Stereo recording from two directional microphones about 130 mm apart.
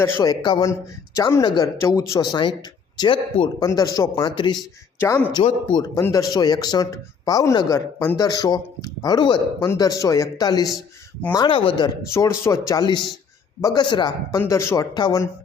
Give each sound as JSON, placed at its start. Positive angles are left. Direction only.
{"t": 0.2, "sound": "speech", "side_deg": 30}
{"t": 3.7, "sound": "speech", "side_deg": 30}
{"t": 4.9, "sound": "speech", "side_deg": 20}
{"t": 12.0, "sound": "speech", "side_deg": 20}